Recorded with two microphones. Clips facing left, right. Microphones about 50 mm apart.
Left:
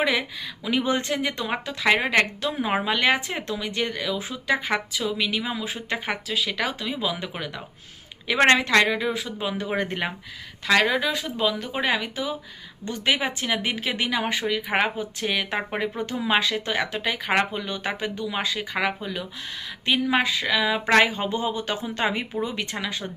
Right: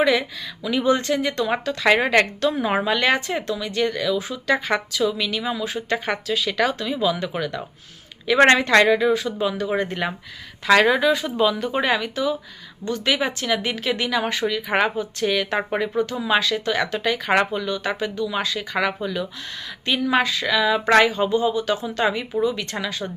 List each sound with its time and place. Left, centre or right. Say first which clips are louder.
0.0 s speech: right 4 dB; centre
1.8 s speech: right 3 dB; centre
3.4 s speech: right 4 dB; left
4.5 s speech: right 2 dB; centre
8.4 s speech: right 3 dB; centre; by 10.1 s left
10.7 s speech: right 5 dB; centre
17.6 s speech: right 4 dB; left
21.0 s speech: right 4 dB; left
22.7 s speech: right 3 dB; centre